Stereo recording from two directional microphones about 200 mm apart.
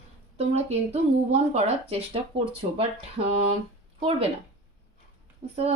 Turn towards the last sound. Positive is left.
turn(degrees=-30)  # may be behind; listen again after turning